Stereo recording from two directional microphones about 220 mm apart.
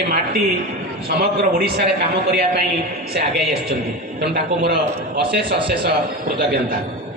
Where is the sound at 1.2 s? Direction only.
45° right (ahead or behind).